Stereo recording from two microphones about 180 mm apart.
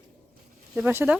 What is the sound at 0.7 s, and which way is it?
Speech, 10° right (ahead or behind).